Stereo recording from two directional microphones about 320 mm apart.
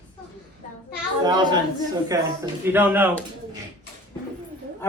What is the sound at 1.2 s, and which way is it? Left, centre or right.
A man's voice, centre.